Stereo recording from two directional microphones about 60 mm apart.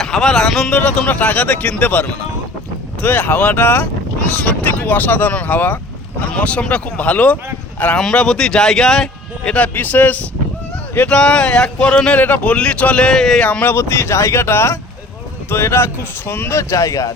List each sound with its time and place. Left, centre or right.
0.0 s speech: centre
0.8 s speech: left
6.3 s speech: centre
9.6 s speech: left
11.1 s speech: centre
12.2 s speech: left; by 13.4 s centre
13.4 s speech: left
13.7 s speech: left